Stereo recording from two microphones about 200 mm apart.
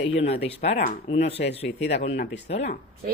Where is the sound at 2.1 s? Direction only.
60° left (ahead or behind).